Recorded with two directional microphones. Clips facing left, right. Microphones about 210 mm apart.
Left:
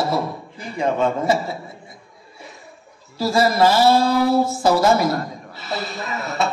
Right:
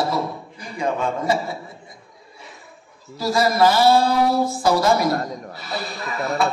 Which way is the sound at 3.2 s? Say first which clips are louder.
Left 1 dB; 30° left (ahead or behind).